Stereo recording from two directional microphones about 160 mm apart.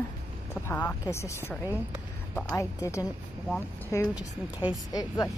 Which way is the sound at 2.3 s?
20° left (ahead or behind).